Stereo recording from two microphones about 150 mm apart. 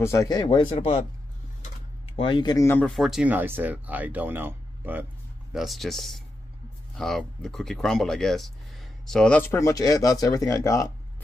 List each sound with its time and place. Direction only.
0.0 s speech: 20° left (ahead or behind); by 1.0 s 40° left (ahead or behind)
2.1 s speech: 35° left (ahead or behind); by 2.9 s 15° left (ahead or behind)
2.9 s speech: centre (ahead or behind)
5.5 s speech: centre (ahead or behind); by 10.9 s 20° left (ahead or behind)